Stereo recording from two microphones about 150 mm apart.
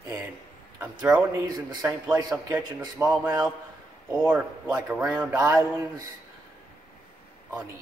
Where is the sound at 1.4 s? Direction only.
25° right (ahead or behind); by 5.0 s 10° right (ahead or behind).